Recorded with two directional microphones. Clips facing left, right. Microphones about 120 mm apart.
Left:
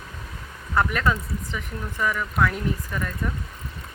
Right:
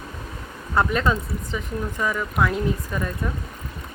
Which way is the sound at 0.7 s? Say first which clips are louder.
Right 2 dB; 20° right (ahead or behind).